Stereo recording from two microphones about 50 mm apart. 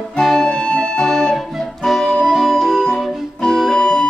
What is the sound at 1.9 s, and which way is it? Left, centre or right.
Music, centre.